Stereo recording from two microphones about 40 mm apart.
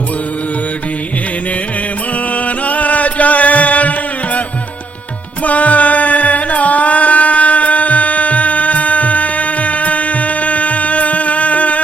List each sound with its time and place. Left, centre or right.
2.3 s music: left